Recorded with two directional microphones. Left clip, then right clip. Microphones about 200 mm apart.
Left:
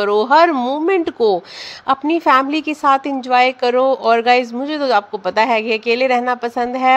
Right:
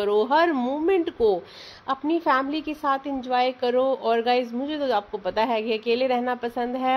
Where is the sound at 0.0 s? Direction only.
15° left (ahead or behind).